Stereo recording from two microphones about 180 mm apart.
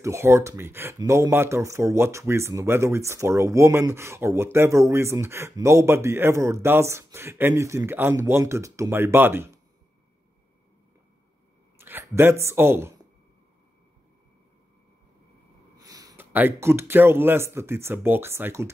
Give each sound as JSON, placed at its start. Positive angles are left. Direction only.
{"t": 0.0, "sound": "speech", "side_deg": -15}
{"t": 11.8, "sound": "speech", "side_deg": -10}
{"t": 15.8, "sound": "a sound", "side_deg": -20}
{"t": 16.3, "sound": "speech", "side_deg": -10}